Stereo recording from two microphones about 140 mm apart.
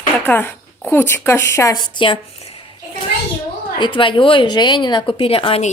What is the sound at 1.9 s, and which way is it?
Speech, 35° left (ahead or behind).